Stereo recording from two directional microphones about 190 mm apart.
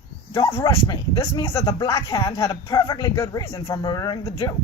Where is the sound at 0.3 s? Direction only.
15° left (ahead or behind).